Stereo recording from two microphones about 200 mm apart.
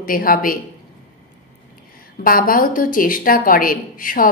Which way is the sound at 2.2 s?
45° left (ahead or behind).